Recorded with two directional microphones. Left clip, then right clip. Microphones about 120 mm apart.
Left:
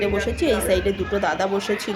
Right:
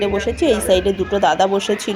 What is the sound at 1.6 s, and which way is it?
Speech, 5° right (ahead or behind).